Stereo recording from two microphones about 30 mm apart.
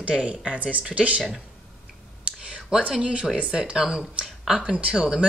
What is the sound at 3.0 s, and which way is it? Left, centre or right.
Speech, right.